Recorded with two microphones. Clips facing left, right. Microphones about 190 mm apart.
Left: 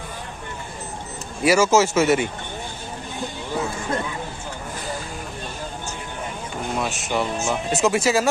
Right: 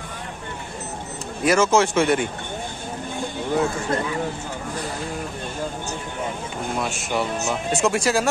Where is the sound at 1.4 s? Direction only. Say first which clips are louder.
Left 1 dB; 5° left (ahead or behind).